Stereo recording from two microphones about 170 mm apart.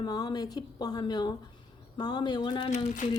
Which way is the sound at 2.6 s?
45° left (ahead or behind).